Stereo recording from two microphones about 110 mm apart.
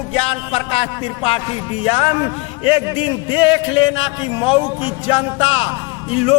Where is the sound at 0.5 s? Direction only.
60° left (ahead or behind).